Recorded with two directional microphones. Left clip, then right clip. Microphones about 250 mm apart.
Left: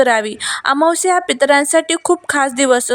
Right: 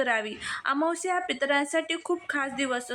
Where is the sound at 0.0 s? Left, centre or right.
Left.